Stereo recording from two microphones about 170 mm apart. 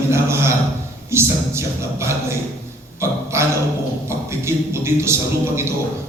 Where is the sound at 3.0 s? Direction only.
15° right (ahead or behind).